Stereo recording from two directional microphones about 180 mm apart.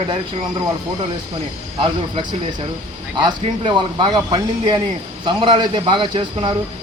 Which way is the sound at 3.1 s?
25° right (ahead or behind).